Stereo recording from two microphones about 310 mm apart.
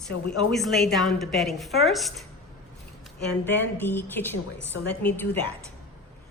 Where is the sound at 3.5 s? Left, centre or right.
Centre.